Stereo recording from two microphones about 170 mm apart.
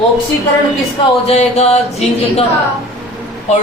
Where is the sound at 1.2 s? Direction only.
40° left (ahead or behind).